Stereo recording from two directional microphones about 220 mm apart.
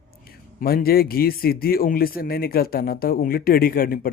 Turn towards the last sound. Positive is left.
turn(degrees=40)  # may be behind; listen again after turning